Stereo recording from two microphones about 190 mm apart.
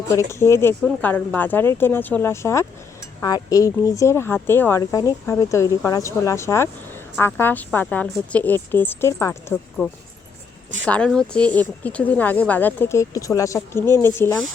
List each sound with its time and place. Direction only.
0.1 s speech: 15° left (ahead or behind)
10.8 s speech: 5° left (ahead or behind)